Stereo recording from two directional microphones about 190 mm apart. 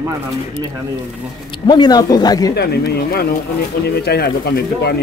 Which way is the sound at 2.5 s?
60° left (ahead or behind).